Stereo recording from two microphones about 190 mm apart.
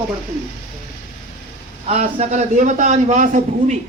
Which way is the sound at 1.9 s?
35° right (ahead or behind).